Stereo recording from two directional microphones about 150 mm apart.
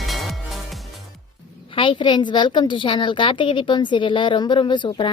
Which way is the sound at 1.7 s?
35° left (ahead or behind).